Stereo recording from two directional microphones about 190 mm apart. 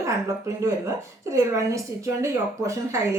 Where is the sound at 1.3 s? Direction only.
15° right (ahead or behind).